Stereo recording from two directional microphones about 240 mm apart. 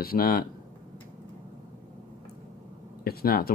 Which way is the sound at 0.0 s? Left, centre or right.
Left.